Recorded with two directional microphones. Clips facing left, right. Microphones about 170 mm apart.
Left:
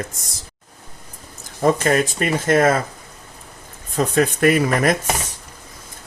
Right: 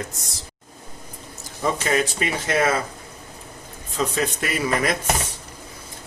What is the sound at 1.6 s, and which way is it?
Speech, 50° left (ahead or behind).